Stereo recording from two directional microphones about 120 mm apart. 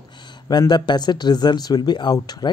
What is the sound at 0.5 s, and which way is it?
Speech, 35° left (ahead or behind).